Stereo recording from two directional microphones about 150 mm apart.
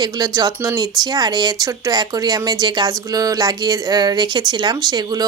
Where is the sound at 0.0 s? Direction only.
25° right (ahead or behind).